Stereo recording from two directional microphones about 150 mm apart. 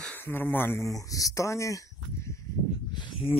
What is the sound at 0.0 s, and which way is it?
Speech, 10° left (ahead or behind).